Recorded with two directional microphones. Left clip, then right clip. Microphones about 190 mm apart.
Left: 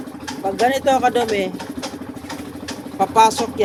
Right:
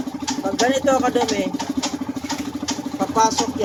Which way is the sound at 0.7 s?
50° left (ahead or behind).